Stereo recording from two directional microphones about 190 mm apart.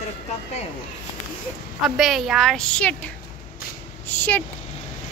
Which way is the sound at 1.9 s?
Centre (ahead or behind).